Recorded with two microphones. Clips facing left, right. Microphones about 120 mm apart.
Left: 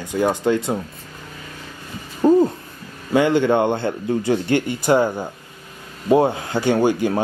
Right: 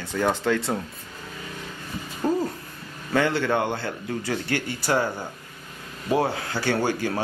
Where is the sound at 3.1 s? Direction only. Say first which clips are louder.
Left 6 dB; 15° left (ahead or behind).